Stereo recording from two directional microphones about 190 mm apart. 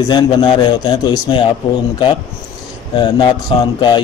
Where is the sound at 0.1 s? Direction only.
25° left (ahead or behind).